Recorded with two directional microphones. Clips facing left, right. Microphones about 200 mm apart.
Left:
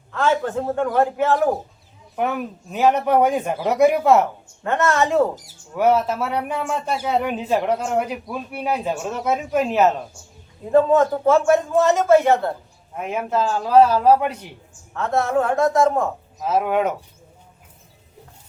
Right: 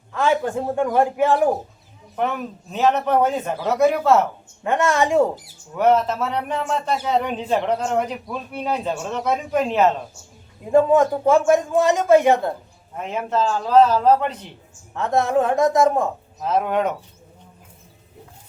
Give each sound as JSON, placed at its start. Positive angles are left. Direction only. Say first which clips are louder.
{"t": 0.1, "sound": "a man's voice", "louder": "even", "side_deg": -10}
{"t": 2.1, "sound": "speech", "louder": "left 1 dB", "side_deg": 5}
{"t": 4.6, "sound": "a man's voice", "louder": "even", "side_deg": -15}
{"t": 5.7, "sound": "speech", "louder": "even", "side_deg": 10}
{"t": 10.7, "sound": "a man's voice", "louder": "even", "side_deg": -15}
{"t": 13.0, "sound": "speech", "louder": "even", "side_deg": 10}
{"t": 14.9, "sound": "a man's voice", "louder": "right 1 dB", "side_deg": -15}
{"t": 16.4, "sound": "speech", "louder": "left 1 dB", "side_deg": 5}